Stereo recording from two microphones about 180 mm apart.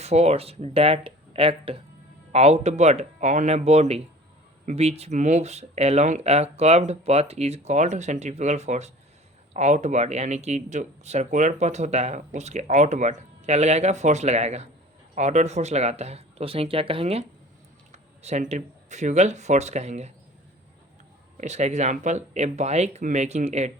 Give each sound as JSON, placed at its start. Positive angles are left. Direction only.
{"t": 0.0, "sound": "speech", "side_deg": -35}
{"t": 21.3, "sound": "speech", "side_deg": -40}